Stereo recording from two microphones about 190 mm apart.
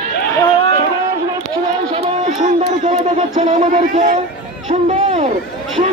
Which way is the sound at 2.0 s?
35° right (ahead or behind).